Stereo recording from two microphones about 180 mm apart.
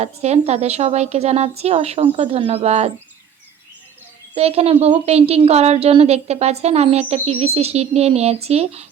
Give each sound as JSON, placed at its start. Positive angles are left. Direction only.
{"t": 0.0, "sound": "a woman's voice", "side_deg": -35}
{"t": 4.4, "sound": "a woman's voice", "side_deg": -35}